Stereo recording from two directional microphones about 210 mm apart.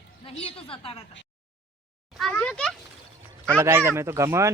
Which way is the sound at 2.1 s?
5° left (ahead or behind).